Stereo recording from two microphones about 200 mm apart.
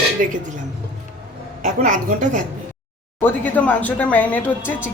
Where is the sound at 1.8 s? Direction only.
40° right (ahead or behind).